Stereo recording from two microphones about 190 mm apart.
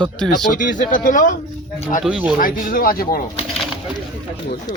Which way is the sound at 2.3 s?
50° left (ahead or behind).